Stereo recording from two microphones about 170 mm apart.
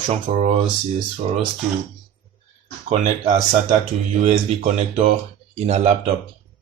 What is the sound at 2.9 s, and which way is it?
Speech, 45° right (ahead or behind).